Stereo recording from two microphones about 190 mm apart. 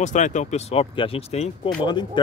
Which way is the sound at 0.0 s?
40° left (ahead or behind).